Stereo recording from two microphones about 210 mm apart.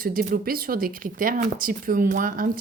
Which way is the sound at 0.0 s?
45° right (ahead or behind).